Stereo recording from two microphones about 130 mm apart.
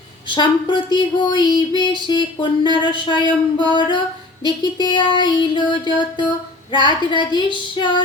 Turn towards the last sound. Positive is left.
turn(degrees=35)  # may be behind; listen again after turning